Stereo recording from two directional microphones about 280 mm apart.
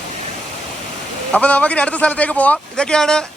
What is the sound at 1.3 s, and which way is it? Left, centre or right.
Speech, centre.